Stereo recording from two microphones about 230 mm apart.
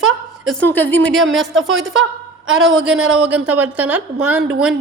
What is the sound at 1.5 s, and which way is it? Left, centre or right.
A woman's voice, right.